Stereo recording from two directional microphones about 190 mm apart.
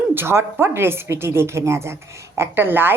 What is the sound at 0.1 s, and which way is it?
Speech, 10° right (ahead or behind).